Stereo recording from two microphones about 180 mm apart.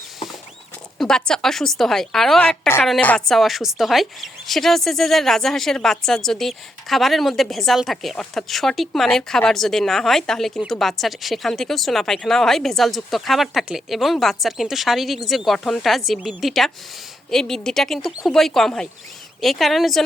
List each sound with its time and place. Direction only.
0.9 s a woman's voice: 5° left (ahead or behind)